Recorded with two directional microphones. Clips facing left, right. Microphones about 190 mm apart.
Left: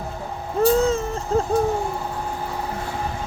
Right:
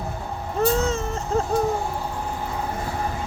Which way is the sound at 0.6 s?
30° left (ahead or behind).